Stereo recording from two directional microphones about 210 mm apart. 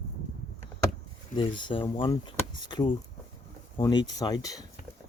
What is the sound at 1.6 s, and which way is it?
Speech, 20° left (ahead or behind).